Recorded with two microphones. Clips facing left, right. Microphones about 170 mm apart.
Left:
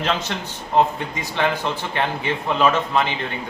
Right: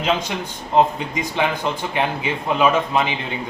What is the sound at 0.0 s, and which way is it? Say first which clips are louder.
A man's voice: right 2 dB; 10° right (ahead or behind).